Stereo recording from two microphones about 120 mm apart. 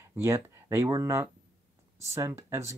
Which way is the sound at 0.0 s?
25° right (ahead or behind).